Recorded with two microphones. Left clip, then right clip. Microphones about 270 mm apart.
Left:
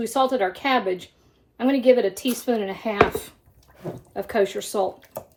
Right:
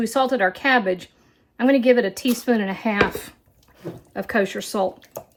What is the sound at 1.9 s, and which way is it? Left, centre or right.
Speech, right.